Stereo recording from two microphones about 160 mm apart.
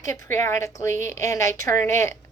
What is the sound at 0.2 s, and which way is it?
A woman's voice, 15° left (ahead or behind).